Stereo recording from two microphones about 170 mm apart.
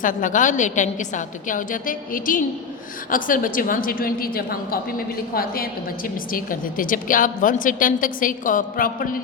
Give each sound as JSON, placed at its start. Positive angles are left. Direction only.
{"t": 0.0, "sound": "a woman's voice", "side_deg": 50}